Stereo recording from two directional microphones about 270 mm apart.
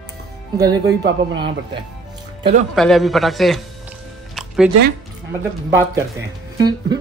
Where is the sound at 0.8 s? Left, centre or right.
Right.